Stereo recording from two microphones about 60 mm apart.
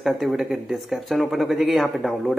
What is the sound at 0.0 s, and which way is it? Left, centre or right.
Speech, centre.